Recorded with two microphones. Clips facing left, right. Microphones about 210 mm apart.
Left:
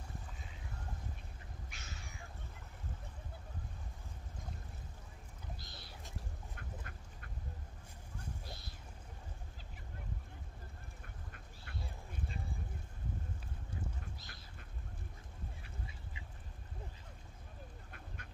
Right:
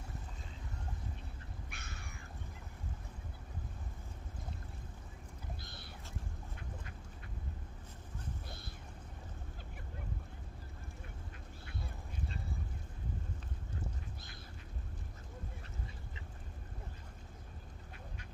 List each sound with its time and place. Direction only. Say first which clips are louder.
1.7 s cat: right 2 dB; 60° right (ahead or behind)
5.6 s a sound: right 2 dB; 55° right (ahead or behind)
6.5 s duck: right 1 dB; 55° left (ahead or behind)